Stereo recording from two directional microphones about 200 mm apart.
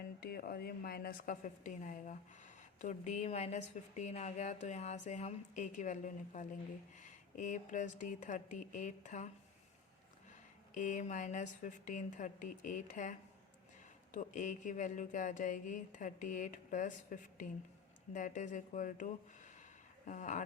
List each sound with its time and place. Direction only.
0.2 s a woman's voice: 50° left (ahead or behind)
10.8 s a woman's voice: 40° left (ahead or behind)